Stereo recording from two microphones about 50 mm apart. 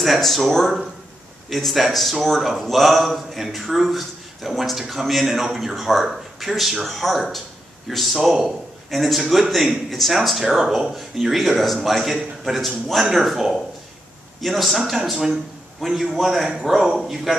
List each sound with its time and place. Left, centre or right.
0.0 s a man's voice: centre